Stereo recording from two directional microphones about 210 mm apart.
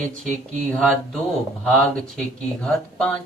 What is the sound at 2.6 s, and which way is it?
Speech, 5° left (ahead or behind).